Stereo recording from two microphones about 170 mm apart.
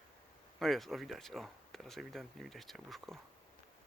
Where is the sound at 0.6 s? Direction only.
Centre (ahead or behind).